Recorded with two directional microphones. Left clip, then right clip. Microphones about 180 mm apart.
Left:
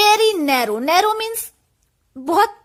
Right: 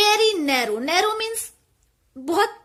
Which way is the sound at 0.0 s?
40° left (ahead or behind).